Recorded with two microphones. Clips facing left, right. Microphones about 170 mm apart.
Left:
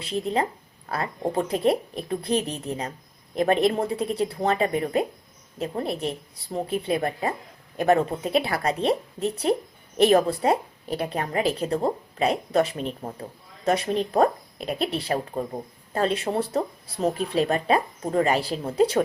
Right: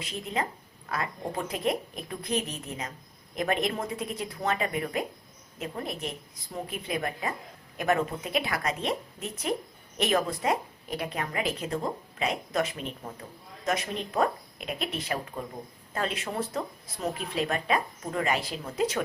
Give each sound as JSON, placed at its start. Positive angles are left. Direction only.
{"t": 0.0, "sound": "a woman's voice", "side_deg": 30}